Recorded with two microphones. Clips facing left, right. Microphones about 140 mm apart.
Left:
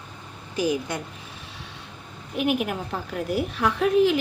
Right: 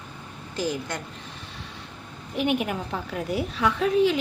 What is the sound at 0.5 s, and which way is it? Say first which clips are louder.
Speech: left 4 dB; 10° left (ahead or behind).